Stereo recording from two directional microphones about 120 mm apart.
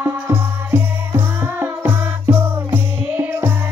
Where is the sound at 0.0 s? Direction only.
20° right (ahead or behind).